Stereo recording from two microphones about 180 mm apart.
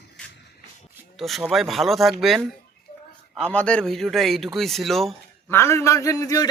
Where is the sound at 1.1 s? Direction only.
Centre (ahead or behind).